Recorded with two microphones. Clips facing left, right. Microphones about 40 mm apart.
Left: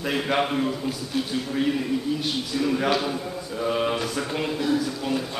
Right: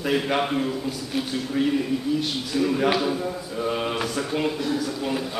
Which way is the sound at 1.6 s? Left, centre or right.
Centre.